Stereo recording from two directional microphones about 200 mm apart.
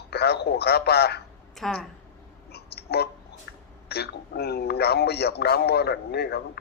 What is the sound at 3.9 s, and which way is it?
A man's voice, 55° left (ahead or behind).